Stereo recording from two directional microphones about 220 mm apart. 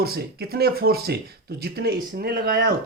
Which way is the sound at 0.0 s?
45° right (ahead or behind).